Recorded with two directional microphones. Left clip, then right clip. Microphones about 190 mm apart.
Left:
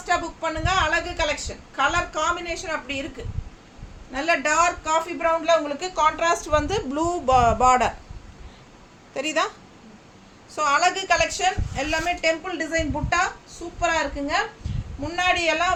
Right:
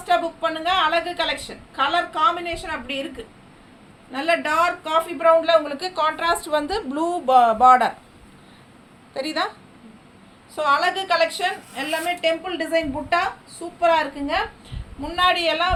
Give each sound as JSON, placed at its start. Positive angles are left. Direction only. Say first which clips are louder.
{"t": 0.0, "sound": "a woman's voice", "louder": "right 4 dB", "side_deg": 10}
{"t": 4.1, "sound": "a woman's voice", "louder": "right 1 dB", "side_deg": 10}
{"t": 9.1, "sound": "a woman's voice", "louder": "left 1 dB", "side_deg": 15}
{"t": 10.5, "sound": "a woman's voice", "louder": "right 1 dB", "side_deg": 15}